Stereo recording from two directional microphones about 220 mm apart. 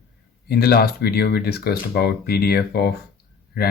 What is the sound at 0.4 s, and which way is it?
Speech, 45° left (ahead or behind).